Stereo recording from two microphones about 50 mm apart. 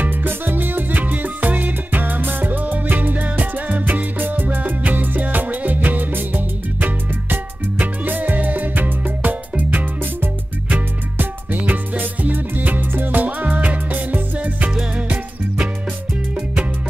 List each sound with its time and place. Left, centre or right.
0.0 s music: right